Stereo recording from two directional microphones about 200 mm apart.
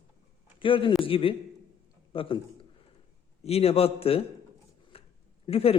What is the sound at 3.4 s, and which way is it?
Speech, 30° left (ahead or behind).